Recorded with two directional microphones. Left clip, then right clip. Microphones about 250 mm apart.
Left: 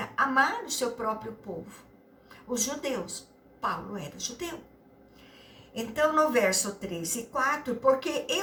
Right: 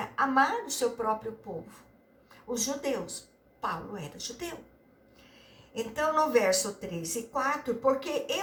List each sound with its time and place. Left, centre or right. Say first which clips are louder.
0.0 s a woman's voice: left 1 dB; centre
2.5 s a woman's voice: even; centre
5.7 s a woman's voice: left 3 dB; centre